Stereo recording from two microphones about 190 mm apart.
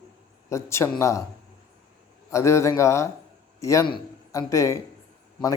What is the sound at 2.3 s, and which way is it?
A woman's voice, 15° left (ahead or behind).